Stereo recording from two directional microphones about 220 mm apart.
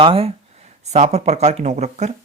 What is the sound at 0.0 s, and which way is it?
Speech, 25° right (ahead or behind).